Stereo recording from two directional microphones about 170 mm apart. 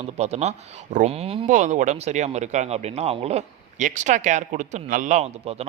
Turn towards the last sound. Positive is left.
turn(degrees=-40)  # may be behind; listen again after turning